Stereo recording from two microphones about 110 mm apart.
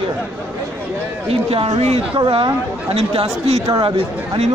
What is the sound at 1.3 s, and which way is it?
Speech, 60° right (ahead or behind).